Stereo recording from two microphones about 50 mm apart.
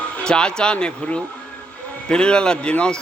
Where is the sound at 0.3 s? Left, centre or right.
Centre.